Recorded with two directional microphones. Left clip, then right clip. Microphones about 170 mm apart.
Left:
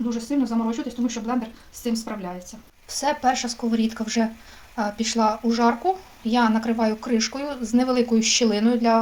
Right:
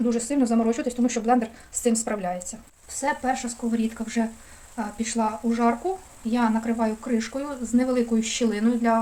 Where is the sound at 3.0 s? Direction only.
5° left (ahead or behind).